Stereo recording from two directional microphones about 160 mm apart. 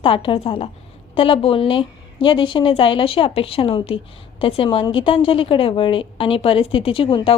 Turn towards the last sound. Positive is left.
turn(degrees=35)  # may be behind; listen again after turning